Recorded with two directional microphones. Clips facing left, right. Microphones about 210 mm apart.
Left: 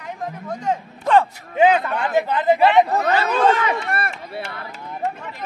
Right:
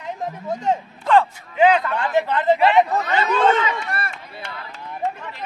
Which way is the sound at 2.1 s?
15° left (ahead or behind).